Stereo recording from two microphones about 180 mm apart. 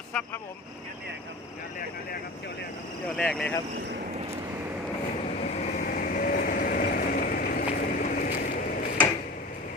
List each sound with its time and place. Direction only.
3.2 s speech: 5° left (ahead or behind)
5.4 s vehicle: 40° left (ahead or behind)